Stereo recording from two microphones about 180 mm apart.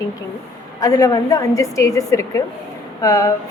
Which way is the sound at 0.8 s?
20° left (ahead or behind).